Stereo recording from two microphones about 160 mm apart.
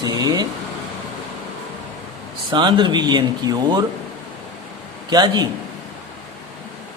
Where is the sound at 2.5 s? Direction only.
30° right (ahead or behind).